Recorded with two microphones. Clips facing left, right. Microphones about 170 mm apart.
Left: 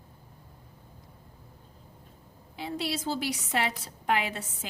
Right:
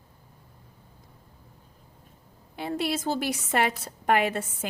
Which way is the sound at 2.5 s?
55° right (ahead or behind).